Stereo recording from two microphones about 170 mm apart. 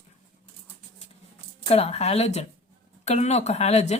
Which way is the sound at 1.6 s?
35° left (ahead or behind).